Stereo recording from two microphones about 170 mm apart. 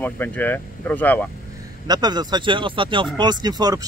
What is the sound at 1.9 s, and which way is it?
Speech, 25° right (ahead or behind).